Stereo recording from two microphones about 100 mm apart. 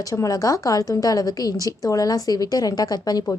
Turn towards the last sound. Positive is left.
turn(degrees=40)  # may be behind; listen again after turning